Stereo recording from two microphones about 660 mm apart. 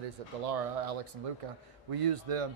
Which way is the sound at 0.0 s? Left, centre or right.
Right.